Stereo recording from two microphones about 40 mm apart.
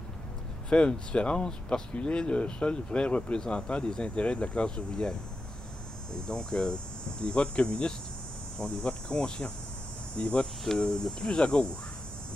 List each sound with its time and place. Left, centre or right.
0.7 s speech: left
6.1 s speech: left